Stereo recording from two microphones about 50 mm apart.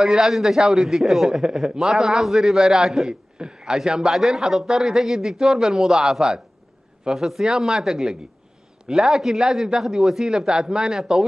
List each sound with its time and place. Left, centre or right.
0.0 s a man's voice: centre